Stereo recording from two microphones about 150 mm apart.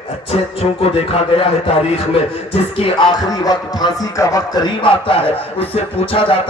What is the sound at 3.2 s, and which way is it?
Music, 25° left (ahead or behind).